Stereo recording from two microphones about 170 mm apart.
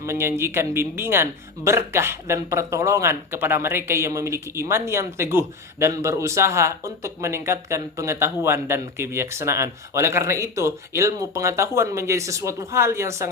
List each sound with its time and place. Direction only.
0.0 s speech: 15° right (ahead or behind)